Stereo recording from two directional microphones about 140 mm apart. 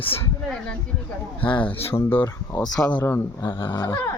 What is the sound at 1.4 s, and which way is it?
Speech, 40° left (ahead or behind).